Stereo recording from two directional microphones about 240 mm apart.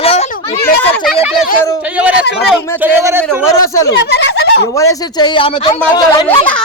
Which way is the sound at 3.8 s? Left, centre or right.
Left.